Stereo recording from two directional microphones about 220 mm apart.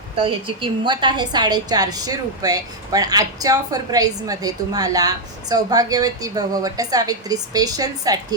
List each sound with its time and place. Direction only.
0.2 s a woman's voice: 25° right (ahead or behind)